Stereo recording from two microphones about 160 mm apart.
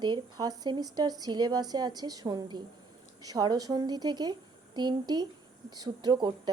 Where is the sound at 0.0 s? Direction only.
25° right (ahead or behind).